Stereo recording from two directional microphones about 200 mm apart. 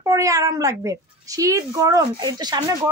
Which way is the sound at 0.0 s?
15° right (ahead or behind).